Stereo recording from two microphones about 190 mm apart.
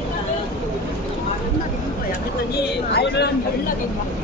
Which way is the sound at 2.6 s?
60° left (ahead or behind).